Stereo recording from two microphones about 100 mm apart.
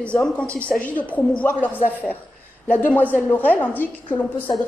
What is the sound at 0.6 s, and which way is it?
A woman's voice, 15° left (ahead or behind).